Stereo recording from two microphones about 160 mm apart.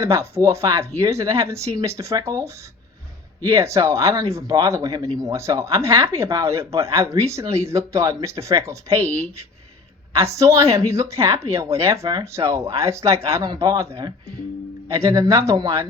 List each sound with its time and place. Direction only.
0.0 s a woman's voice: 15° right (ahead or behind)
3.5 s a woman's voice: 20° right (ahead or behind)